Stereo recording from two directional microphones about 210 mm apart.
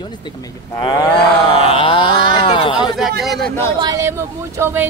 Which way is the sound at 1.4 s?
25° left (ahead or behind).